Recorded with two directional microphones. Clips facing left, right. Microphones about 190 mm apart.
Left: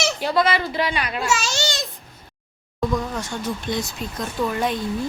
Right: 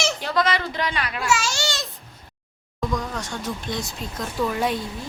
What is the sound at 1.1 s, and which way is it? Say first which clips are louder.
Speech: even; 25° left (ahead or behind).